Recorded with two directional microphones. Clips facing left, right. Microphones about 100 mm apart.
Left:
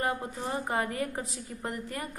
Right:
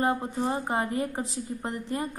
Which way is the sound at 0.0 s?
25° right (ahead or behind).